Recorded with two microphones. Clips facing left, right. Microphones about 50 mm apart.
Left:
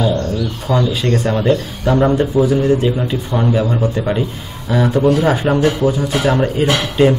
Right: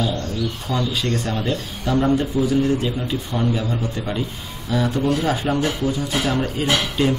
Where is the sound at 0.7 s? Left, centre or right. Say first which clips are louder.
Left 8 dB; left.